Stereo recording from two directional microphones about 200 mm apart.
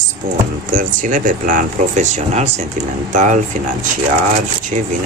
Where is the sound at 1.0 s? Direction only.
40° right (ahead or behind).